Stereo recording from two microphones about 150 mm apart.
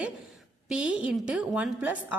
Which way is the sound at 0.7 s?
5° right (ahead or behind).